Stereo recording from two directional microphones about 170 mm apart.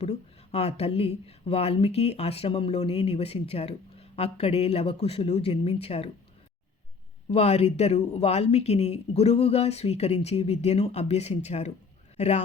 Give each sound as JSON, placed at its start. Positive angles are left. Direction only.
{"t": 0.0, "sound": "speech", "side_deg": 35}
{"t": 7.3, "sound": "speech", "side_deg": 40}